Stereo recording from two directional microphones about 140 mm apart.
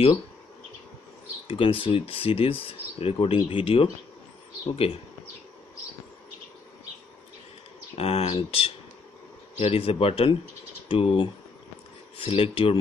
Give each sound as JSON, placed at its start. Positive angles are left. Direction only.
{"t": 1.5, "sound": "speech", "side_deg": 40}
{"t": 8.0, "sound": "speech", "side_deg": 45}
{"t": 12.3, "sound": "speech", "side_deg": 40}